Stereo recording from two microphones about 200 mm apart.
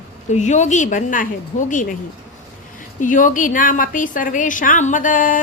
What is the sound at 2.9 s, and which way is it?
A woman's voice, 40° left (ahead or behind).